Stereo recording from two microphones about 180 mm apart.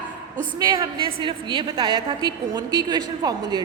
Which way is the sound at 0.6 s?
25° right (ahead or behind).